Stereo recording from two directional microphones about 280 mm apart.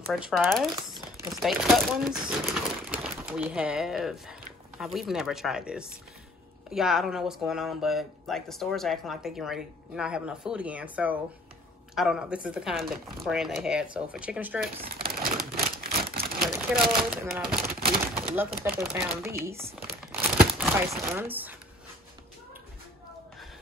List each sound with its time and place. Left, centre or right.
0.0 s speech: centre
1.1 s chopping: centre
1.4 s speech: centre
15.0 s a sound: right
16.3 s speech: centre
18.0 s pigeon: centre
18.6 s speech: centre
19.4 s crumpling: centre